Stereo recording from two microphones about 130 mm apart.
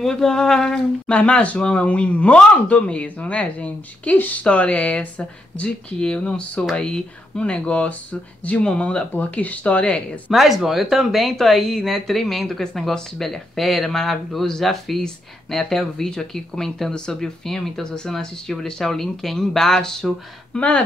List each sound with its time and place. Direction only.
0.0 s speech: 5° left (ahead or behind)
10.3 s speech: centre (ahead or behind)